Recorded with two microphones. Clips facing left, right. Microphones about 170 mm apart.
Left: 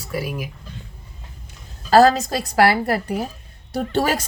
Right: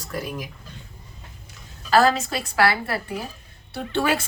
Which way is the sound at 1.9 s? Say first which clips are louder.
Left 5 dB; 40° left (ahead or behind).